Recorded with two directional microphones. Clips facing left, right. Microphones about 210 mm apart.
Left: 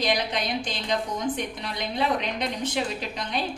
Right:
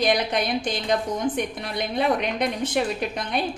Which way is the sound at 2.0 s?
55° right (ahead or behind).